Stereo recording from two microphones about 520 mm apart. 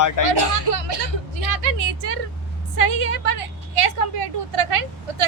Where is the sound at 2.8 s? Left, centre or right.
Right.